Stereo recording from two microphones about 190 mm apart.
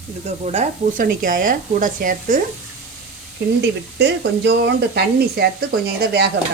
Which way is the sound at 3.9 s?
60° right (ahead or behind).